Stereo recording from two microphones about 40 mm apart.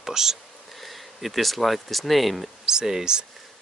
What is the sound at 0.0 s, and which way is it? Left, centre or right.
Speech, centre.